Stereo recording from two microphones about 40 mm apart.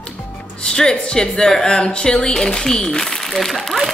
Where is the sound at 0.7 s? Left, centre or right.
Centre.